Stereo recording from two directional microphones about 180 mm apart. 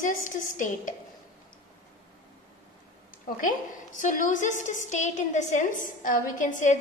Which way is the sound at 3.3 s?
45° left (ahead or behind).